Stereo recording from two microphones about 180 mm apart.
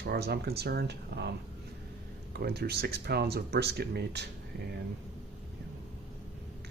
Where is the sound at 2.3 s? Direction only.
60° right (ahead or behind).